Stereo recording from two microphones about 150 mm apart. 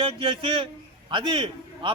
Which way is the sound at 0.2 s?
35° right (ahead or behind).